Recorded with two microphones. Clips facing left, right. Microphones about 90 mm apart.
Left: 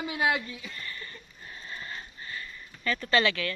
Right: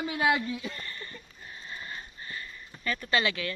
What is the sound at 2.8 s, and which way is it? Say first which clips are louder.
Speech: left 3 dB; 15° right (ahead or behind).